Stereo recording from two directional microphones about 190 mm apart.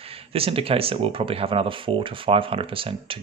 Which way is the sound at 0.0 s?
30° right (ahead or behind).